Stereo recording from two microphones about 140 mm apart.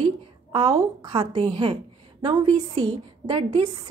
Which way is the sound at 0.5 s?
30° right (ahead or behind).